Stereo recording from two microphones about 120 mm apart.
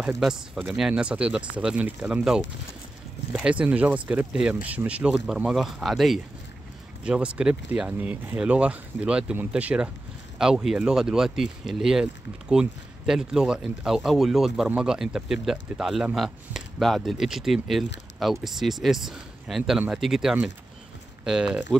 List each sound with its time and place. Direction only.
0.7 s speech: 5° right (ahead or behind)